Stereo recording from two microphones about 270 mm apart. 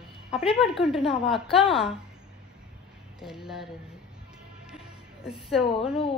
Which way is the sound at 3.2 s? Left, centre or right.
Centre.